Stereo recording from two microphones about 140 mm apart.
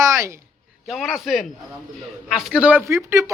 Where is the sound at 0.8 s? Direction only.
Centre (ahead or behind); by 3.3 s 20° right (ahead or behind).